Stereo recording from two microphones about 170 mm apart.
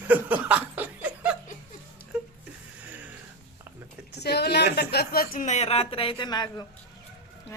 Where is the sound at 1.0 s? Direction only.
10° right (ahead or behind).